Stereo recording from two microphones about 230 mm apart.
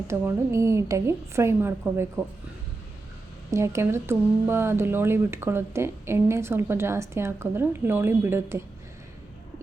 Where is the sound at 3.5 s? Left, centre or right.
Centre.